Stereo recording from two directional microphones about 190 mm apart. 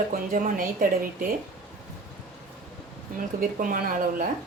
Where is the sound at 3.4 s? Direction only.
45° right (ahead or behind).